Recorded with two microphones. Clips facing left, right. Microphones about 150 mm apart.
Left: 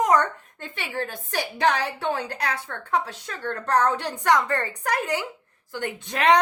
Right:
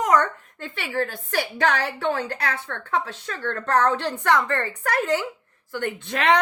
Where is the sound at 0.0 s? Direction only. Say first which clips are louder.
Even; 15° left (ahead or behind).